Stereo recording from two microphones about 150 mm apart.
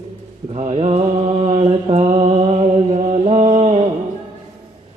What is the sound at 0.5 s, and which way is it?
Mantra, 40° right (ahead or behind).